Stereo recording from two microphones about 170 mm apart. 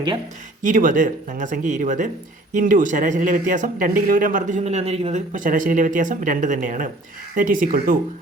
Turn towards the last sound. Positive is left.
turn(degrees=-55)  # may be behind; listen again after turning